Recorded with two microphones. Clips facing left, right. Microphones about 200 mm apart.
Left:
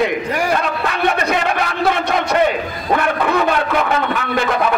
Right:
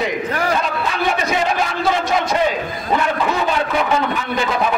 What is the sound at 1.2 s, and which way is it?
A man's voice, 60° left (ahead or behind).